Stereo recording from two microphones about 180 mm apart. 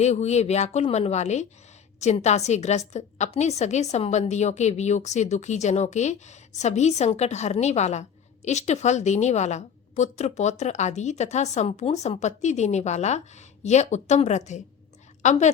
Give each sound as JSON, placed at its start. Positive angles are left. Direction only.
{"t": 0.0, "sound": "a woman's voice", "side_deg": 40}